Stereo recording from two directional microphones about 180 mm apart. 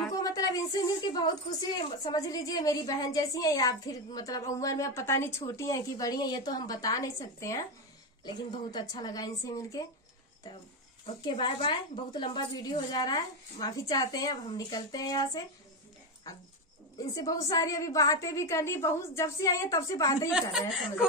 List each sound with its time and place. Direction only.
0.1 s a sound: 20° left (ahead or behind)
1.0 s a woman's voice: 25° left (ahead or behind)
11.1 s a woman's voice: 25° left (ahead or behind)
20.2 s a woman's voice: 5° right (ahead or behind)